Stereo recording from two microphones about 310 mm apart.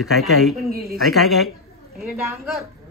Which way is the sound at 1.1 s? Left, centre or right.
Centre.